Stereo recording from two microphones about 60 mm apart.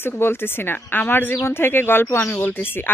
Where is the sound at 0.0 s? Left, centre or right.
Left.